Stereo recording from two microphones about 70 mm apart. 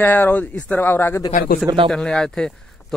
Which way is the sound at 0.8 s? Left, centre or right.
Left.